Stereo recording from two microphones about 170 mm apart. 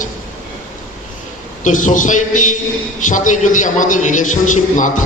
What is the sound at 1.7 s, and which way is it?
A man's voice, 50° left (ahead or behind).